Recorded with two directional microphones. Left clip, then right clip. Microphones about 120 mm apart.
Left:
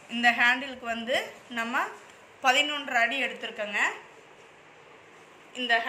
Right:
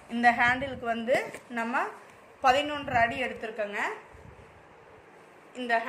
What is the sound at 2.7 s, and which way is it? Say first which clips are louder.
Speech: even; 90° right.